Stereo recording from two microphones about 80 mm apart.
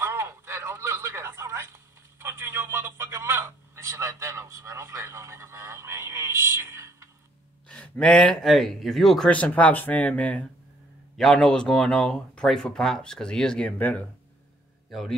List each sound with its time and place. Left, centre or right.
0.0 s radio: right
7.6 s speech: centre
9.3 s speech: centre
11.1 s speech: centre
14.9 s speech: centre